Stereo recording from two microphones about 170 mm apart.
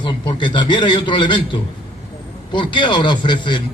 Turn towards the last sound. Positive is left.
turn(degrees=30)  # may be behind; listen again after turning